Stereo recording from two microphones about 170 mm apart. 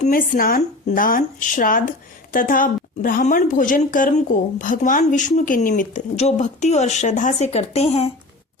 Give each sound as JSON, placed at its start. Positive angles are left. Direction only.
{"t": 0.0, "sound": "a woman's voice", "side_deg": 55}